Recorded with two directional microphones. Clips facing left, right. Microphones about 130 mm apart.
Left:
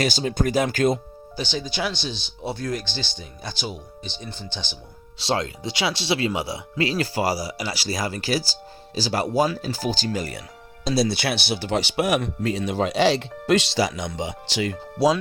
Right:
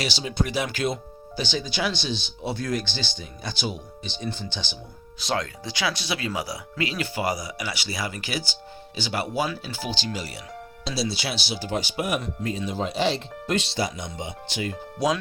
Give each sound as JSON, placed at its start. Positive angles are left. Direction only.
{"t": 0.0, "sound": "speech", "side_deg": 45}
{"t": 5.2, "sound": "speech", "side_deg": 25}
{"t": 14.9, "sound": "speech", "side_deg": 30}